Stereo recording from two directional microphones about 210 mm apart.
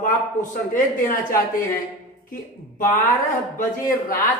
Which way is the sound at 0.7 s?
40° left (ahead or behind).